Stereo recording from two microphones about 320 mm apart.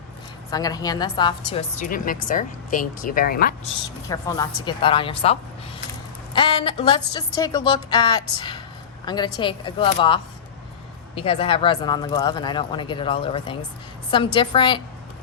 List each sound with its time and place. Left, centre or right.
0.5 s a woman's voice: centre; by 3.7 s left
4.1 s a woman's voice: centre